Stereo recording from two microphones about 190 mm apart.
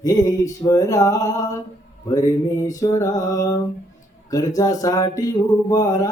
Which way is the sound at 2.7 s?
20° left (ahead or behind).